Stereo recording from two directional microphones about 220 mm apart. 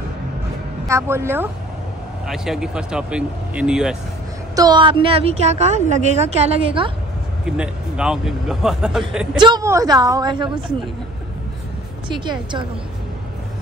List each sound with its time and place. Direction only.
0.8 s a woman's voice: 10° right (ahead or behind)
4.6 s a woman's voice: 20° right (ahead or behind)
7.4 s speech: 5° right (ahead or behind)
9.4 s a woman's voice: 15° right (ahead or behind)
12.3 s a woman's voice: 20° right (ahead or behind)